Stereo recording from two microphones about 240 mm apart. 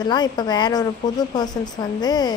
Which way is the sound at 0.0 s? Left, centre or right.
Centre.